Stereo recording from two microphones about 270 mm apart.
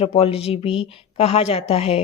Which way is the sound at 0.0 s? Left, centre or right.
Left.